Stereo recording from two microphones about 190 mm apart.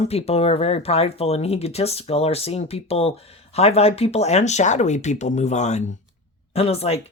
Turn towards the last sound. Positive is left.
turn(degrees=30)  # may be behind; listen again after turning